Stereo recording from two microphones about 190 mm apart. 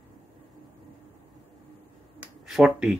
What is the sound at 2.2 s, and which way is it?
Finger snapping, centre (ahead or behind).